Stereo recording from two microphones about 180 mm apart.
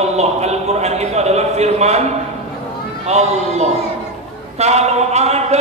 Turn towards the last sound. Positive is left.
turn(degrees=-35)  # may be behind; listen again after turning